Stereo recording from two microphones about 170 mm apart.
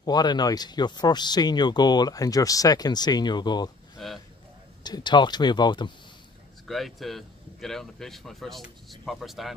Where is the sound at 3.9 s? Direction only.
Centre (ahead or behind).